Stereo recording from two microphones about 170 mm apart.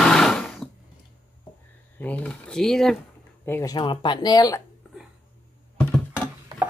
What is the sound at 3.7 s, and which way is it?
Speech, 25° left (ahead or behind).